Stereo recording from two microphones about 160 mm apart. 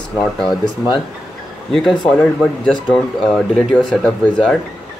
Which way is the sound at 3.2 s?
Centre (ahead or behind).